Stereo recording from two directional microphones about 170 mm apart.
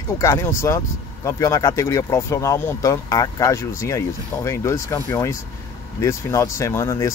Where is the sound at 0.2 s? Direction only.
15° left (ahead or behind).